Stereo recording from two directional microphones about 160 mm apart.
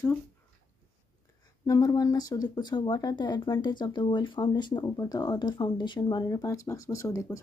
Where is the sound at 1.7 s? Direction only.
20° left (ahead or behind).